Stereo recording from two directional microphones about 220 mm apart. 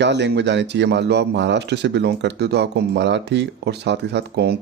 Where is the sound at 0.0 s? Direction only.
50° right (ahead or behind).